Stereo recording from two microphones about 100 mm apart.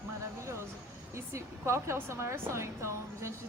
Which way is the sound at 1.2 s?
25° right (ahead or behind).